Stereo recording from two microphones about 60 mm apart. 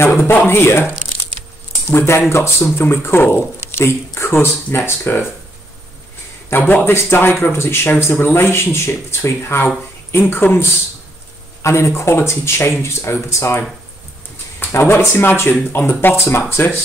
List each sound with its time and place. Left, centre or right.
0.0 s a man's voice: left
6.5 s a man's voice: left
11.6 s speech: left
14.7 s a man's voice: left